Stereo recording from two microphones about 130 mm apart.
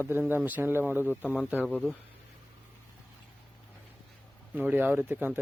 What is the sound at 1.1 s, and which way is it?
Speech, 15° left (ahead or behind).